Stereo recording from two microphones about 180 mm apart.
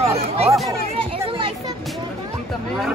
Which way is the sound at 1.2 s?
30° right (ahead or behind).